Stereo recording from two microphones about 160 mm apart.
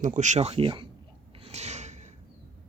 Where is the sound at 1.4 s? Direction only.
45° right (ahead or behind).